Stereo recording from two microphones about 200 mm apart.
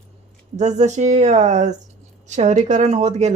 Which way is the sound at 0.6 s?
35° right (ahead or behind).